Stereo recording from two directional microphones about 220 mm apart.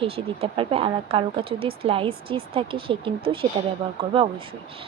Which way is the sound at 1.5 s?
70° right (ahead or behind).